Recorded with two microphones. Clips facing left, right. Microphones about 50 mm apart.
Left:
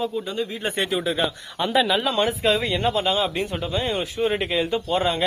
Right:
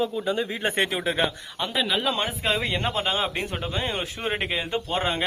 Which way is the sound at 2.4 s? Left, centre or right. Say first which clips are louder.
Left 4 dB; right.